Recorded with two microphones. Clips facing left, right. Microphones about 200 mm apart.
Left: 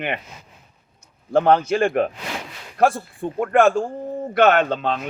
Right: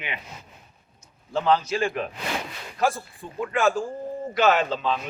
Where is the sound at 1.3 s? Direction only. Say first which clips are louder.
Left 6 dB; 55° left (ahead or behind).